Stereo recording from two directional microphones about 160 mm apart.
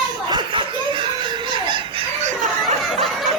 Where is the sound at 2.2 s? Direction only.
50° right (ahead or behind).